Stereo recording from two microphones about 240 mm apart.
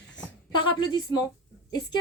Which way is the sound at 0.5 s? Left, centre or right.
Centre.